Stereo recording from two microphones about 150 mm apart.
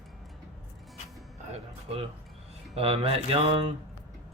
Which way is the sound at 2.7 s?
40° right (ahead or behind).